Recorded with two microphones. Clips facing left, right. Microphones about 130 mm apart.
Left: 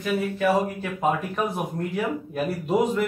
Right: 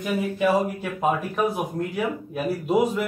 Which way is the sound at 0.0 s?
15° right (ahead or behind).